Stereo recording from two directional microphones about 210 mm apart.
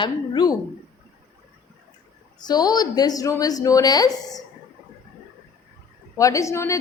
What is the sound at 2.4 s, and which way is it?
A woman's voice, 20° left (ahead or behind).